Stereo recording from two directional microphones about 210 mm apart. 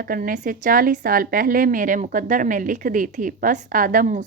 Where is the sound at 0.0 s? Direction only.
40° right (ahead or behind).